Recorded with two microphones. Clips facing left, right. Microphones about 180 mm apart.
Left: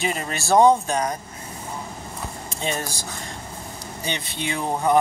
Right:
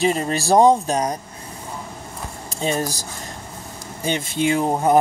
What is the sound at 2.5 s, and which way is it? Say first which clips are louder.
Speech: right 6 dB; 40° right (ahead or behind).